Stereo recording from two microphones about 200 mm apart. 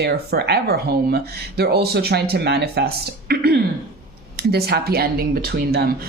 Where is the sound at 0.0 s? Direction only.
55° right (ahead or behind).